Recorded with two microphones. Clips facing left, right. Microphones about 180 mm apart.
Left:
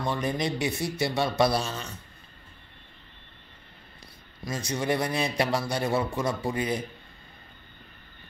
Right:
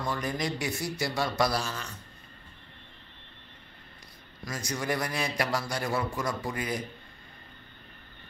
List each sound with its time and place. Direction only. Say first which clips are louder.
0.0 s a man's voice: left 3 dB; 25° left (ahead or behind)
4.5 s a man's voice: left 4 dB; 25° left (ahead or behind)